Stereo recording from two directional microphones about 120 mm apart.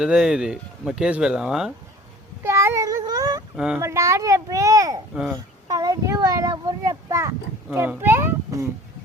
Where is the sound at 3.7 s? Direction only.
25° right (ahead or behind).